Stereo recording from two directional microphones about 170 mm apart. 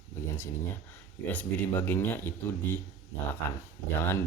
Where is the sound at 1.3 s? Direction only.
10° left (ahead or behind).